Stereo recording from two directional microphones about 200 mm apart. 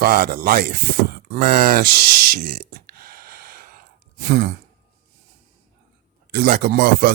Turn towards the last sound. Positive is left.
turn(degrees=-50)  # may be behind; listen again after turning